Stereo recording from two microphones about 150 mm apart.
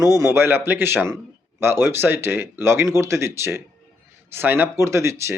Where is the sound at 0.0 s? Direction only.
20° right (ahead or behind).